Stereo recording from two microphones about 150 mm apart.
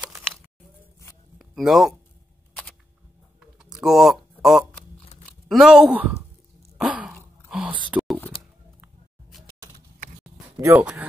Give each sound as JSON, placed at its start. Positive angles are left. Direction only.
{"t": 1.4, "sound": "speech", "side_deg": 0}
{"t": 3.7, "sound": "speech", "side_deg": 0}
{"t": 6.8, "sound": "a sound", "side_deg": -10}
{"t": 10.6, "sound": "speech", "side_deg": -20}